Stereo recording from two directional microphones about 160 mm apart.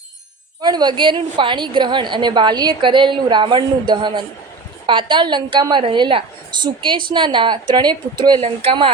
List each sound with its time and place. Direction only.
0.6 s a woman's voice: 25° right (ahead or behind)
8.4 s speech: 35° right (ahead or behind)